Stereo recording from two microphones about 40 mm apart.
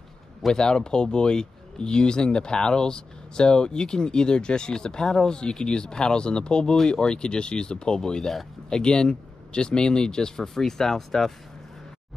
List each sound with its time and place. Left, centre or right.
0.5 s speech: centre